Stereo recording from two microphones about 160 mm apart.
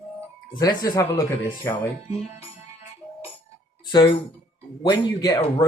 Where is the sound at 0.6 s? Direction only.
25° left (ahead or behind).